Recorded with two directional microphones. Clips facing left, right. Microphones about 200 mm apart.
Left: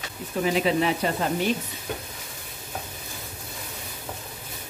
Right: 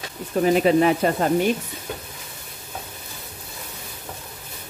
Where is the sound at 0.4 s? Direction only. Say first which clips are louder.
Right 6 dB; 50° right (ahead or behind).